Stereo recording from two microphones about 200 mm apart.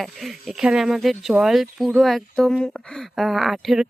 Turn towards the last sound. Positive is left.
turn(degrees=0)  # may be behind; listen again after turning